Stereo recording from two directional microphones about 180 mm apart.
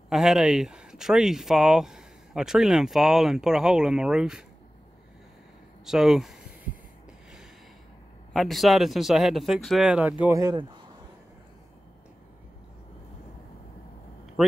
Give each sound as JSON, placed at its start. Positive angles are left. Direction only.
{"t": 0.1, "sound": "speech", "side_deg": 0}
{"t": 5.9, "sound": "speech", "side_deg": 0}
{"t": 8.3, "sound": "speech", "side_deg": 0}
{"t": 10.2, "sound": "speech", "side_deg": -20}